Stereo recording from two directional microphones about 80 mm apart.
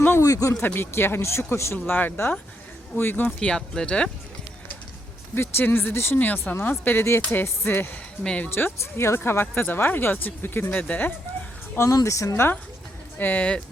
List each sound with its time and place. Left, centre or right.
0.2 s speech: left
0.6 s speech: left
3.2 s speech: centre
5.3 s speech: left
8.2 s speech: centre
8.4 s speech: left
11.8 s speech: left
13.1 s speech: left